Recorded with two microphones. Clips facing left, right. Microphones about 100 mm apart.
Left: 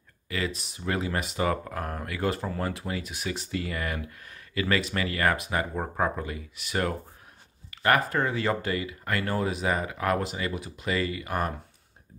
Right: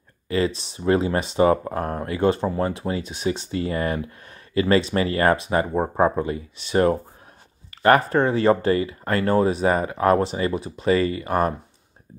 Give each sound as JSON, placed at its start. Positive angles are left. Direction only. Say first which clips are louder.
{"t": 0.3, "sound": "speech", "louder": "right 9 dB", "side_deg": -30}